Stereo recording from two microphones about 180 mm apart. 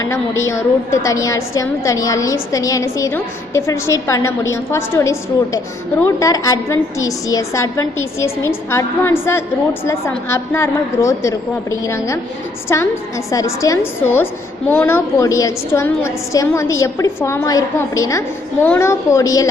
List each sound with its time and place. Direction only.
0.4 s a woman's voice: 15° left (ahead or behind)